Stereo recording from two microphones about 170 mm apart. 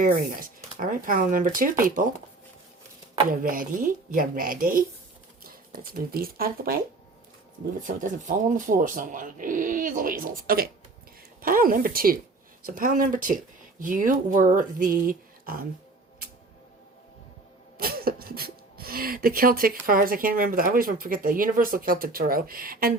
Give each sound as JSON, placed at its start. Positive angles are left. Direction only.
{"t": 0.0, "sound": "speech", "side_deg": -55}
{"t": 3.2, "sound": "speech", "side_deg": -55}
{"t": 7.9, "sound": "speech", "side_deg": -50}
{"t": 17.7, "sound": "a sound", "side_deg": -60}
{"t": 19.8, "sound": "speech", "side_deg": -55}